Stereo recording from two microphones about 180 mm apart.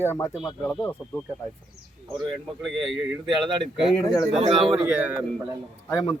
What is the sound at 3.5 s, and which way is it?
Speech, 30° right (ahead or behind).